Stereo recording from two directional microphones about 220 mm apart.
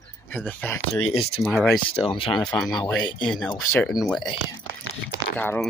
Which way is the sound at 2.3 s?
Centre (ahead or behind).